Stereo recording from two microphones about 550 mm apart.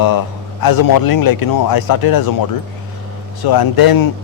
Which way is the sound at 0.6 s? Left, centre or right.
Left.